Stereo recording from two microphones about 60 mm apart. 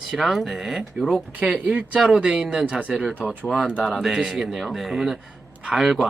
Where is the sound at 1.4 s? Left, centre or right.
Centre.